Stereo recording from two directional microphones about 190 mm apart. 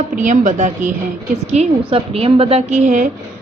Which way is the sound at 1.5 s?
30° right (ahead or behind).